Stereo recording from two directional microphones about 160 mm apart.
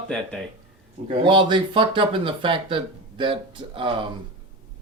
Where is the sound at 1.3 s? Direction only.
30° right (ahead or behind).